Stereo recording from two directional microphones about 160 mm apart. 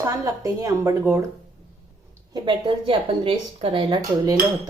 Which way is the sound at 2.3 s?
30° right (ahead or behind).